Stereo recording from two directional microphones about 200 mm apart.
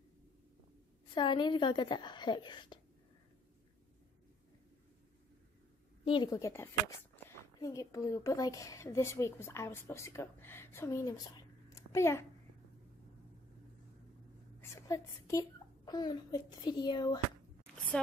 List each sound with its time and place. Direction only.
1.1 s a woman's voice: 25° left (ahead or behind)
6.0 s a woman's voice: 25° left (ahead or behind)
14.6 s a child's voice: 15° left (ahead or behind)